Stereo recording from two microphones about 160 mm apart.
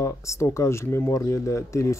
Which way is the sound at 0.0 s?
20° left (ahead or behind).